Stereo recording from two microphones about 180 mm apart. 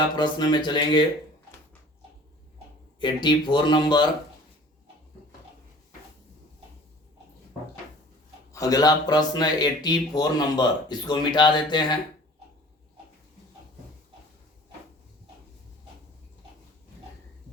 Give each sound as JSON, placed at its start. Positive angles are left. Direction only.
{"t": 0.2, "sound": "speech", "side_deg": 25}
{"t": 3.0, "sound": "speech", "side_deg": 25}
{"t": 8.5, "sound": "speech", "side_deg": 20}